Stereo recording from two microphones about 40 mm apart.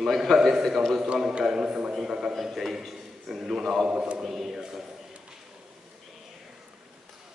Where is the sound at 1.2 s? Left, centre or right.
Centre.